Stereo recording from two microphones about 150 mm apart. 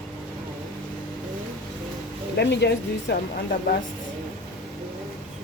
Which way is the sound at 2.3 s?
90° left.